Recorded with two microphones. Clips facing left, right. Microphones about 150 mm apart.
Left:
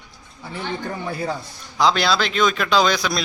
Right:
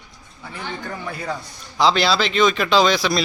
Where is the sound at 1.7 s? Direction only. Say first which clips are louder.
Right 1 dB; centre (ahead or behind).